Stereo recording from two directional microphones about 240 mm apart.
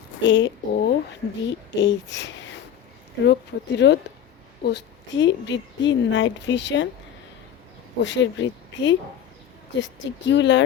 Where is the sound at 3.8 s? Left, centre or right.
Left.